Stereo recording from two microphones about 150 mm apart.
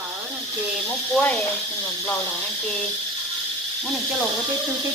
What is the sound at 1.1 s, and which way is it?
Speech, 5° left (ahead or behind).